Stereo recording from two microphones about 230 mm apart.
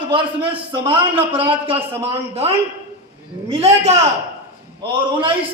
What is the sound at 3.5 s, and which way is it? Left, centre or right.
A man's voice, right.